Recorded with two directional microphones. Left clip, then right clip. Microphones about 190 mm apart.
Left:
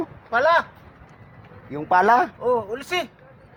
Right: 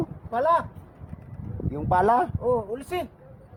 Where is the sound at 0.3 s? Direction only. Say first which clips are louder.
Left 4 dB; 20° right (ahead or behind).